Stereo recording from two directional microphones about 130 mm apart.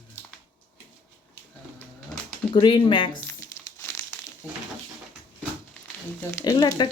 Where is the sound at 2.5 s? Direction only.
35° left (ahead or behind).